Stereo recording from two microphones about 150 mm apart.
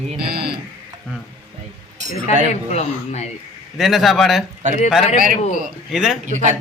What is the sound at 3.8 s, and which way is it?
Speech, centre (ahead or behind).